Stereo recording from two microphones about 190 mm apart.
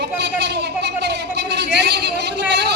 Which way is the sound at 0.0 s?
60° right (ahead or behind).